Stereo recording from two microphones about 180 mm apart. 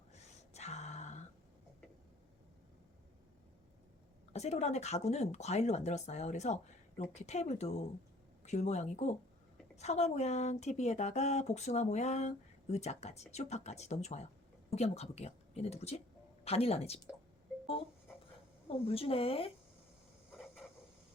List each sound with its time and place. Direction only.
0.1 s a sound: 40° left (ahead or behind)
4.3 s speech: 35° left (ahead or behind)
18.7 s speech: 30° left (ahead or behind)